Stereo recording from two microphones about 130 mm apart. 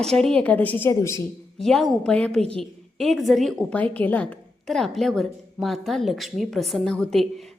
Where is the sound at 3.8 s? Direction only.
15° left (ahead or behind).